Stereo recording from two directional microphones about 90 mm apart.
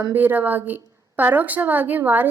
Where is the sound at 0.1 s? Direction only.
20° right (ahead or behind).